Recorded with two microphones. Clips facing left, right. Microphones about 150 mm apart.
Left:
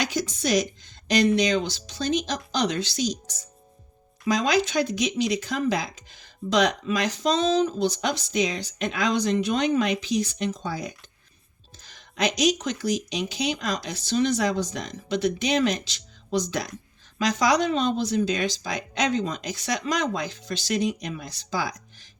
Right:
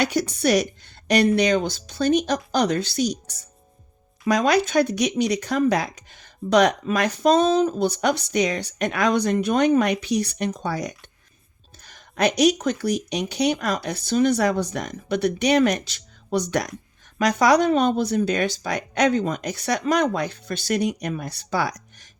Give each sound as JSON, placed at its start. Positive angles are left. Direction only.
{"t": 0.0, "sound": "speech", "side_deg": -65}
{"t": 4.3, "sound": "speech", "side_deg": -60}
{"t": 11.9, "sound": "speech", "side_deg": -55}